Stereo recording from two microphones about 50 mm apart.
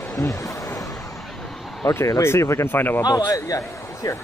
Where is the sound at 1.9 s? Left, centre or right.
Left.